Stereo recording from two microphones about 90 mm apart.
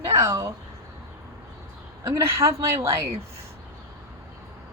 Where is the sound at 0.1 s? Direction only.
35° right (ahead or behind).